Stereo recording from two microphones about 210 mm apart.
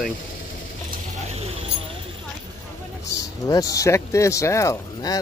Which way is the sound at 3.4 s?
15° left (ahead or behind).